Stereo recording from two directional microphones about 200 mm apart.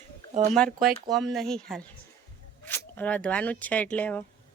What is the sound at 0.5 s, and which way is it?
Speech, 5° left (ahead or behind).